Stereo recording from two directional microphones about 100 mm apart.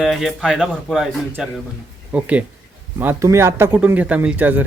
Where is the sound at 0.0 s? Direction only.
Centre (ahead or behind).